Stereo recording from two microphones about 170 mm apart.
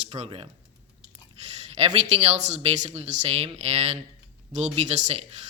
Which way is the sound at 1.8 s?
40° right (ahead or behind).